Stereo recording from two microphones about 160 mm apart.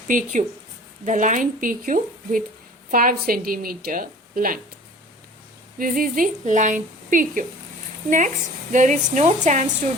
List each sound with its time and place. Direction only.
0.1 s a woman's voice: 50° right (ahead or behind)
5.8 s a woman's voice: 60° right (ahead or behind)
8.7 s speech: 50° right (ahead or behind)